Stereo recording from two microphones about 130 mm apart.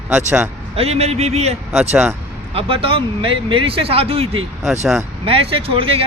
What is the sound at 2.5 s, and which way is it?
Speech, 45° right (ahead or behind).